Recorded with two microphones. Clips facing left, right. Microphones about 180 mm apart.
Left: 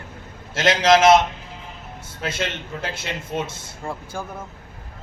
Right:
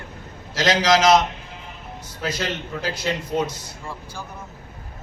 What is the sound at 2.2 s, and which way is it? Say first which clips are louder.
A man's voice: right 1 dB; 25° left (ahead or behind).